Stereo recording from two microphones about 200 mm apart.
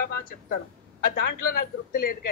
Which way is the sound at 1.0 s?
50° left (ahead or behind).